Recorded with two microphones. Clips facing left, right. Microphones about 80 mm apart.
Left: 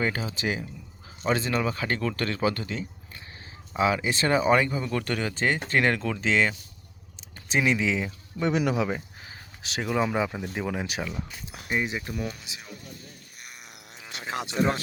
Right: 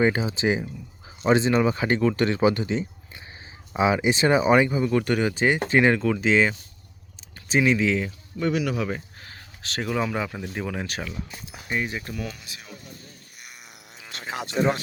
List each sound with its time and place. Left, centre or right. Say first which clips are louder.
0.0 s speech: right 6 dB; centre
14.1 s a sound: even; centre
14.5 s speech: right 3 dB; centre